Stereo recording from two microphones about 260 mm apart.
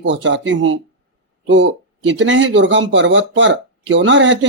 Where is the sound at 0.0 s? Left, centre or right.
Right.